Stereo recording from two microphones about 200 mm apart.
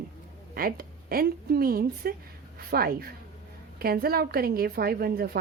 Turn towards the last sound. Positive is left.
turn(degrees=-50)  # may be behind; listen again after turning